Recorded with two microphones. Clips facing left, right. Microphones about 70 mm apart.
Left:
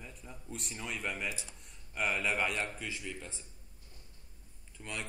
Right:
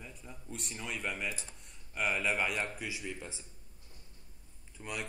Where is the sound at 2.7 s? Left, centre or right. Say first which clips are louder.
Right 1 dB; centre.